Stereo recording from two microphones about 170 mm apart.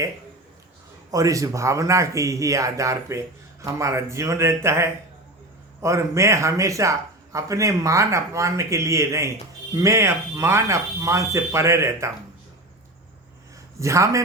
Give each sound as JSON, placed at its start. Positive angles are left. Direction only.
{"t": 1.1, "sound": "speech", "side_deg": -20}
{"t": 13.7, "sound": "speech", "side_deg": -15}